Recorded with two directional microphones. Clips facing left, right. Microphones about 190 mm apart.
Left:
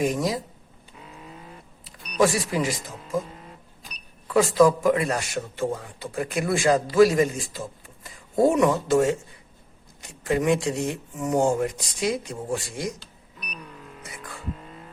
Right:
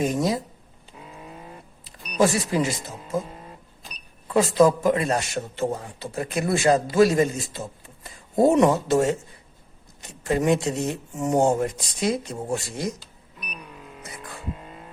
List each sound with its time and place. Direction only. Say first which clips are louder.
0.0 s a man's voice: right 1 dB; 25° right (ahead or behind)
2.1 s a man's voice: right 1 dB; 25° right (ahead or behind)
4.4 s a man's voice: even; 25° right (ahead or behind)